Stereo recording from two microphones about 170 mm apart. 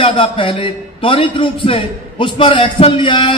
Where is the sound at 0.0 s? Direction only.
30° left (ahead or behind).